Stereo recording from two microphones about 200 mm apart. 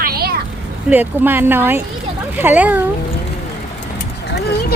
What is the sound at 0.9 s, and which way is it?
Speech, 10° right (ahead or behind).